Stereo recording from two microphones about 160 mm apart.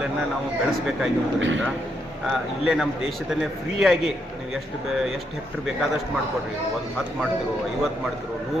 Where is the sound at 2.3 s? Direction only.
5° right (ahead or behind).